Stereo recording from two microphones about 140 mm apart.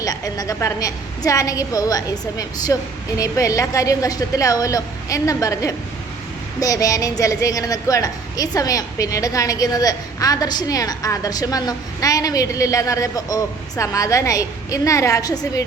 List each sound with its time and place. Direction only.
0.0 s a woman's voice: 25° left (ahead or behind)